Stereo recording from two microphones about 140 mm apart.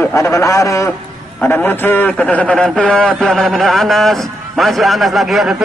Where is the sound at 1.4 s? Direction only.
10° left (ahead or behind).